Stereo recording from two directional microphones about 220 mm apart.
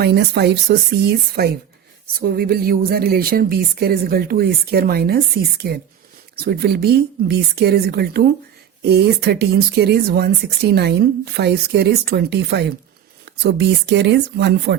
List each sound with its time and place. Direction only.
0.0 s speech: 45° right (ahead or behind)